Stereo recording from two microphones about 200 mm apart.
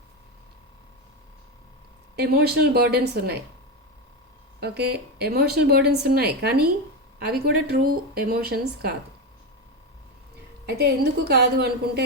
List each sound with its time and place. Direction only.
2.1 s speech: 50° right (ahead or behind)
4.6 s speech: 55° right (ahead or behind)
10.7 s speech: 50° right (ahead or behind)